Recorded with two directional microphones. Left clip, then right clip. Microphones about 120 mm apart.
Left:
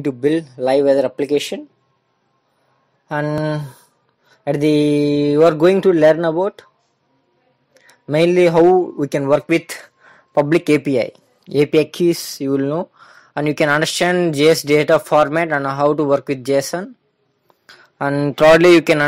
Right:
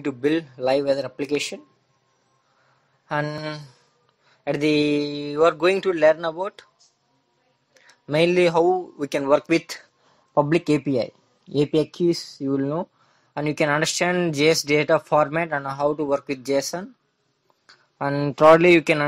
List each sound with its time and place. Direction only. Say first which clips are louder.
0.0 s speech: left 5 dB; 25° left (ahead or behind)
3.1 s speech: left 6 dB; 25° left (ahead or behind)
7.7 s a sound: left 5 dB; 30° left (ahead or behind)
8.7 s speech: left 8 dB; 20° left (ahead or behind); by 16.9 s 40° left (ahead or behind)
17.9 s speech: left 5 dB; 25° left (ahead or behind)